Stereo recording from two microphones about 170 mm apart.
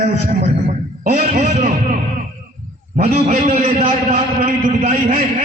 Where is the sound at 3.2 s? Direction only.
40° right (ahead or behind).